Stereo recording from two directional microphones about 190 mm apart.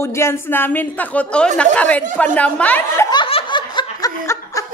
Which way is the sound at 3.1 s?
25° left (ahead or behind).